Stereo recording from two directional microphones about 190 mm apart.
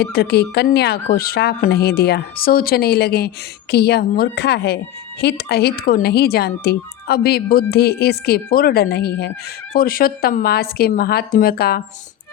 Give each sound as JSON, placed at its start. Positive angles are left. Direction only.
{"t": 0.0, "sound": "a woman's voice", "side_deg": 60}